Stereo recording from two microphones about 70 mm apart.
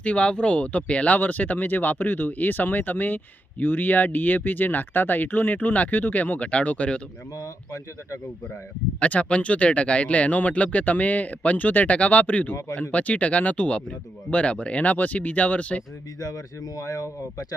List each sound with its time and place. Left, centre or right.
0.0 s speech: centre
7.4 s speech: left
9.0 s speech: centre
16.2 s speech: left